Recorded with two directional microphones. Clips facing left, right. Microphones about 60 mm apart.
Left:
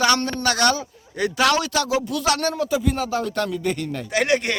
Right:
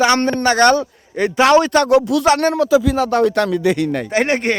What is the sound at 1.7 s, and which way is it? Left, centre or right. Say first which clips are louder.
Speech: right 9 dB; right.